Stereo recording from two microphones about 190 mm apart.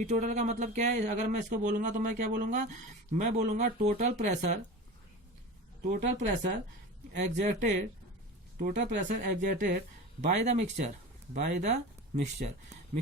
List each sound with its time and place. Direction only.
0.0 s speech: 40° right (ahead or behind)
6.2 s speech: 40° right (ahead or behind)
12.9 s a sound: 40° right (ahead or behind)